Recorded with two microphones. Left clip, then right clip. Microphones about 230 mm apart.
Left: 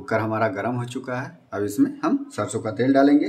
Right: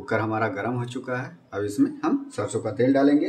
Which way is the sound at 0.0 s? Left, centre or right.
Centre.